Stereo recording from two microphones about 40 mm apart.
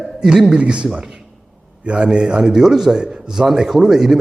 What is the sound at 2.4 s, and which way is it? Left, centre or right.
Speech, centre.